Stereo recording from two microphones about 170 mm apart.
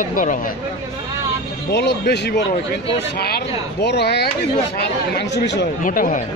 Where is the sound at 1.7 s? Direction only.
80° left.